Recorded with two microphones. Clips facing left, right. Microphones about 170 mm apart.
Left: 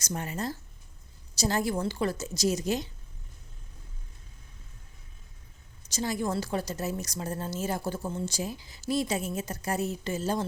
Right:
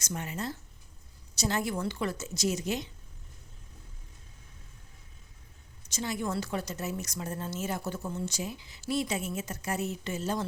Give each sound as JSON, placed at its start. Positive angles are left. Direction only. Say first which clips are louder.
{"t": 0.0, "sound": "a woman's voice", "louder": "left 2 dB", "side_deg": 40}
{"t": 5.9, "sound": "a woman's voice", "louder": "left 3 dB", "side_deg": 35}